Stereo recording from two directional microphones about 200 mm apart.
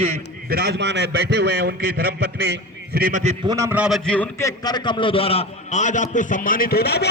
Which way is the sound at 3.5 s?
15° right (ahead or behind).